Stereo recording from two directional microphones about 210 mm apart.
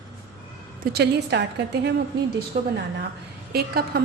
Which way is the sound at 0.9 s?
55° right (ahead or behind).